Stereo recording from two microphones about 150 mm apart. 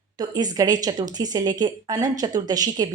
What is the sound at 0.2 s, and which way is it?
A woman's voice, 25° right (ahead or behind).